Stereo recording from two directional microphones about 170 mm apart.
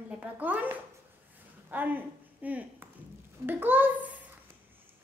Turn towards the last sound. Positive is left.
turn(degrees=-10)  # may be behind; listen again after turning